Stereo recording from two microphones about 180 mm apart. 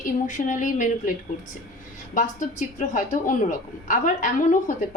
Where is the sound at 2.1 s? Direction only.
45° left (ahead or behind).